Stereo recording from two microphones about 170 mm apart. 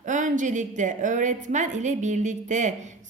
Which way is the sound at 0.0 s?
50° right (ahead or behind).